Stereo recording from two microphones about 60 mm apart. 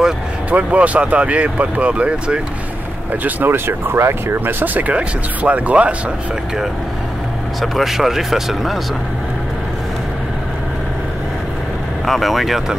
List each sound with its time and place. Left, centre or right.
0.5 s speech: right
3.5 s speech: right
7.6 s speech: centre
12.1 s speech: centre